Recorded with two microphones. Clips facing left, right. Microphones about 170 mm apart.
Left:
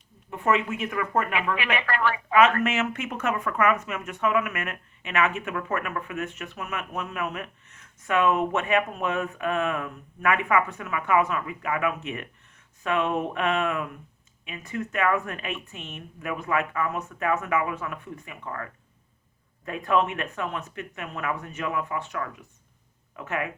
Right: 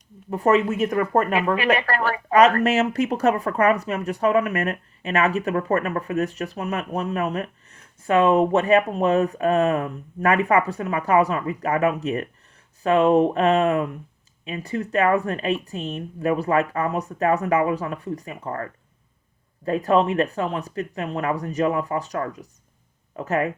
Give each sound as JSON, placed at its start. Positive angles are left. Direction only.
{"t": 0.3, "sound": "speech", "side_deg": -40}